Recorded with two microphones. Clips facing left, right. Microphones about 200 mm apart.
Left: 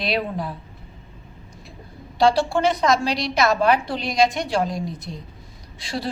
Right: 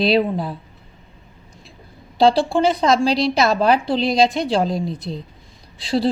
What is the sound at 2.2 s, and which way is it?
A woman's voice, 30° right (ahead or behind).